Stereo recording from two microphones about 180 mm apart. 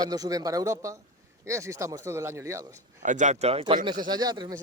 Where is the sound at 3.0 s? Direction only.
45° right (ahead or behind).